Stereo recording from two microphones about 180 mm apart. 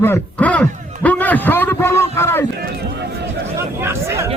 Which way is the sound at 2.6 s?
65° right (ahead or behind).